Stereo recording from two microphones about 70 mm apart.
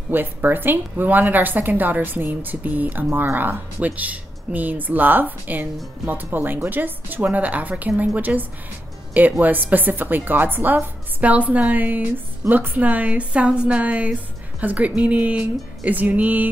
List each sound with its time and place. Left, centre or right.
0.1 s a woman's voice: right